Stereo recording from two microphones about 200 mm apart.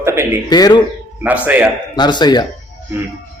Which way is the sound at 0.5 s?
20° left (ahead or behind).